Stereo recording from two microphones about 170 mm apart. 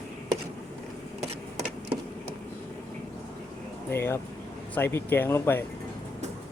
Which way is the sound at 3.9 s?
15° left (ahead or behind).